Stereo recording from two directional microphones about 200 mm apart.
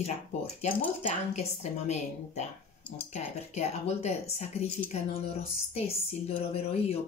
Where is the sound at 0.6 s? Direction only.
30° left (ahead or behind).